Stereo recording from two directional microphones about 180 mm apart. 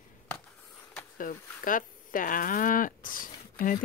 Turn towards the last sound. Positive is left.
turn(degrees=50)  # may be behind; listen again after turning